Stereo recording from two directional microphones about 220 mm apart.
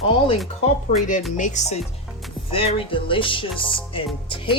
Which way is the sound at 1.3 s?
35° left (ahead or behind).